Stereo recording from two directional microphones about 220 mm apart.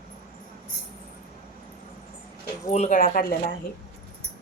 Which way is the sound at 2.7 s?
30° left (ahead or behind).